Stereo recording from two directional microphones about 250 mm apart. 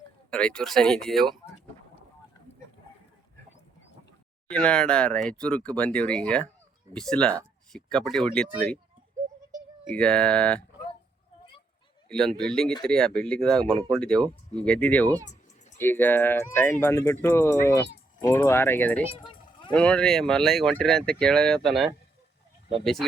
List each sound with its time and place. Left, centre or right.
0.3 s speech: centre
4.4 s speech: centre
9.9 s speech: centre
12.0 s speech: centre
19.1 s a sound: left
19.7 s speech: centre